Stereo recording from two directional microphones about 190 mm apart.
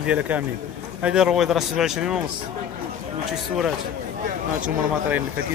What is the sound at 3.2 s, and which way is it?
Speech, centre (ahead or behind).